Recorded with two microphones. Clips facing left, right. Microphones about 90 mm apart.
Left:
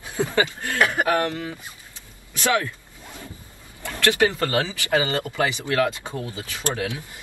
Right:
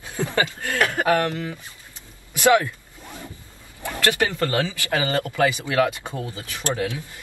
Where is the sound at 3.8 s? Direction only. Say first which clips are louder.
Even; 15° right (ahead or behind).